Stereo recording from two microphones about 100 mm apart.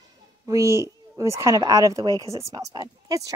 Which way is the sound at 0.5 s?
30° right (ahead or behind).